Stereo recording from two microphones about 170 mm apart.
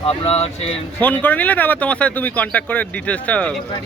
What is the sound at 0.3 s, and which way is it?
Speech, 35° left (ahead or behind).